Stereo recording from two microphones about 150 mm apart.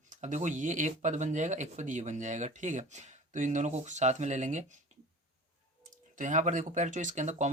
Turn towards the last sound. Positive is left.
turn(degrees=-50)  # may be behind; listen again after turning